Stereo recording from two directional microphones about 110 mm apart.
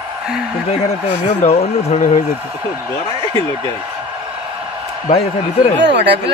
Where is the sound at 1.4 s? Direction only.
70° left (ahead or behind).